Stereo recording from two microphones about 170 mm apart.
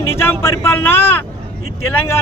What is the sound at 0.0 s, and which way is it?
Speech, 15° left (ahead or behind).